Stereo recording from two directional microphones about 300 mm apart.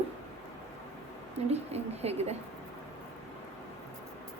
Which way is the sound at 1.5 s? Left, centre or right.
Right.